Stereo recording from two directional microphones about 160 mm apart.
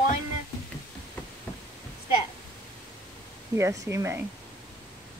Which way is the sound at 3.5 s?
20° right (ahead or behind).